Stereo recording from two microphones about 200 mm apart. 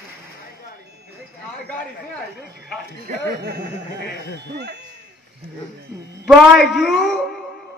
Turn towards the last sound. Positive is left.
turn(degrees=0)  # may be behind; listen again after turning